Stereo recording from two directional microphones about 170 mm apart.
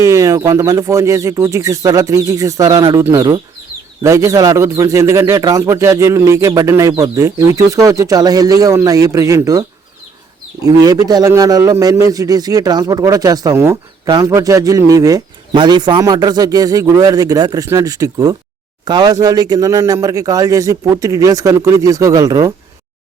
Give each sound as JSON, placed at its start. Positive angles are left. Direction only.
{"t": 0.0, "sound": "a man's voice", "side_deg": -20}